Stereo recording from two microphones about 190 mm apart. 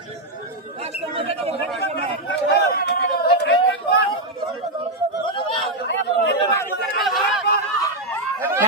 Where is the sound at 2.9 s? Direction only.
60° left (ahead or behind).